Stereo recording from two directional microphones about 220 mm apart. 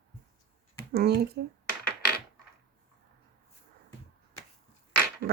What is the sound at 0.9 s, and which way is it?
Speech, 45° right (ahead or behind).